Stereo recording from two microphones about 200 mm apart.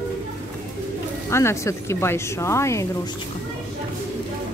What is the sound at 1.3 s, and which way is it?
A woman's voice, 15° left (ahead or behind).